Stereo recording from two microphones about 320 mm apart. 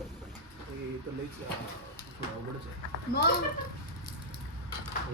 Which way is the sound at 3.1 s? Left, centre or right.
Left.